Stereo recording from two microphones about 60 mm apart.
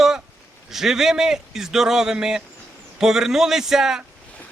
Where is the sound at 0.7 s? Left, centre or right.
Centre.